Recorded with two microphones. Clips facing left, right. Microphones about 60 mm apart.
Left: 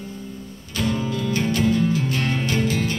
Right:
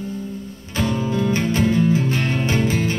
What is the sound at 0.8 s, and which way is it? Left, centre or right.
Music, right.